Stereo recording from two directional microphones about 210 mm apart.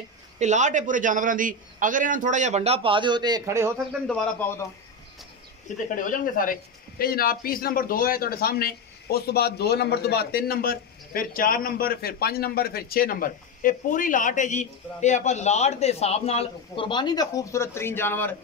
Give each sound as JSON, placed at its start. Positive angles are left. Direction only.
{"t": 0.4, "sound": "a man's voice", "side_deg": -35}
{"t": 4.1, "sound": "a man's voice", "side_deg": 5}
{"t": 5.9, "sound": "a man's voice", "side_deg": 40}